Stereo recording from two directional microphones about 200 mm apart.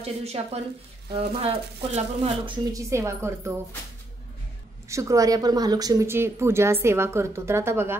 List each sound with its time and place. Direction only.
0.0 s speech: 30° right (ahead or behind); by 3.5 s 15° right (ahead or behind)
4.8 s speech: 15° right (ahead or behind)